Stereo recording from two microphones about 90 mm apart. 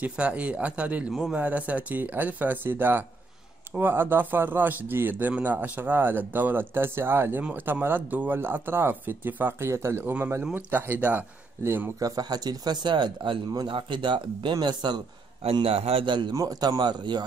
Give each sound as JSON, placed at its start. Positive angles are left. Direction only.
{"t": 0.0, "sound": "a man's voice", "side_deg": -15}
{"t": 1.4, "sound": "speech", "side_deg": -15}
{"t": 12.0, "sound": "speech", "side_deg": -45}
{"t": 15.4, "sound": "a man's voice", "side_deg": -90}
{"t": 16.3, "sound": "speech", "side_deg": -45}